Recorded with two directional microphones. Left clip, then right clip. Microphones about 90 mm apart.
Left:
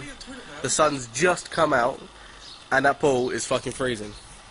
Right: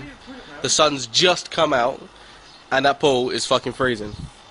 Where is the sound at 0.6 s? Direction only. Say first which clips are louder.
Right 4 dB; 20° right (ahead or behind).